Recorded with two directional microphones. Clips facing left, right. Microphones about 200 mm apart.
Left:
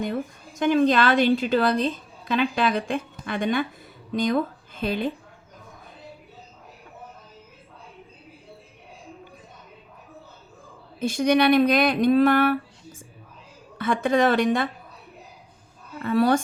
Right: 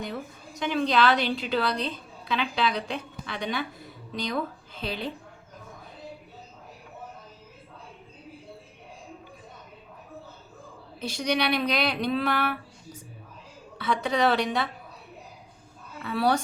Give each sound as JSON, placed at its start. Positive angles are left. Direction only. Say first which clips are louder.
{"t": 0.0, "sound": "a woman's voice", "louder": "left 7 dB", "side_deg": 50}
{"t": 11.0, "sound": "a woman's voice", "louder": "left 8 dB", "side_deg": 50}
{"t": 16.0, "sound": "a woman's voice", "louder": "left 5 dB", "side_deg": 50}